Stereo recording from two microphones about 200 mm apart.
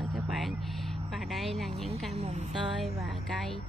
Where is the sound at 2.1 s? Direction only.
35° right (ahead or behind).